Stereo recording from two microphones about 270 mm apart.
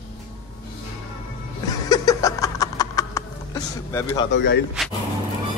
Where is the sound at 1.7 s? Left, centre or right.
Centre.